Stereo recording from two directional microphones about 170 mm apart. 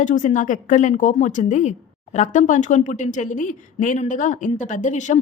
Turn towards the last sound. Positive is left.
turn(degrees=45)  # may be behind; listen again after turning